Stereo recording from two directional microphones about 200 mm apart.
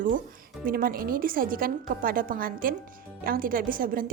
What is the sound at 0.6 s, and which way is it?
A woman's voice, 45° right (ahead or behind).